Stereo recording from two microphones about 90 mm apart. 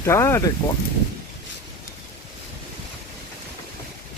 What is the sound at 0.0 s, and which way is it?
Speech, 30° left (ahead or behind).